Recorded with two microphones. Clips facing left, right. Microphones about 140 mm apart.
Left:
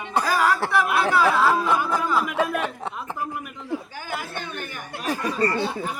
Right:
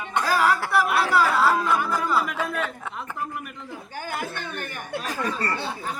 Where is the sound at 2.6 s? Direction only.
20° left (ahead or behind).